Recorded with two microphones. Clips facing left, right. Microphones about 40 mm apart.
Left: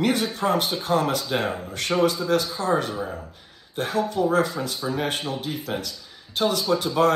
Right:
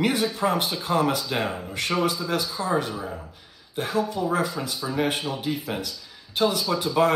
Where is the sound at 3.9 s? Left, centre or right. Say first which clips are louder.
Left 2 dB; left.